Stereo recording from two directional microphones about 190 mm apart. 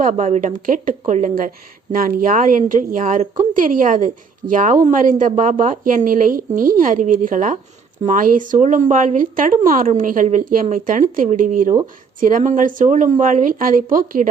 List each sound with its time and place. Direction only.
0.0 s speech: 40° right (ahead or behind)